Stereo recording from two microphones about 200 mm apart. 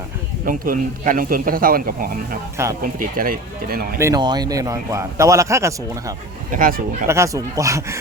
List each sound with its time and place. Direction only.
0.4 s speech: 45° right (ahead or behind)
3.9 s a man's voice: 15° right (ahead or behind)
6.5 s speech: 45° right (ahead or behind)
7.1 s a man's voice: 15° right (ahead or behind)